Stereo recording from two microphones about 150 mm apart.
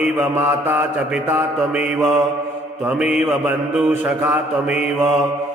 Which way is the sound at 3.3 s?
15° right (ahead or behind).